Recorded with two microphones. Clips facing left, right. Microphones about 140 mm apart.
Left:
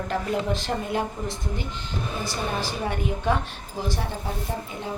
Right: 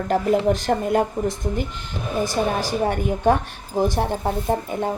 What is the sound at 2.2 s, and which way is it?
Speech, 45° right (ahead or behind).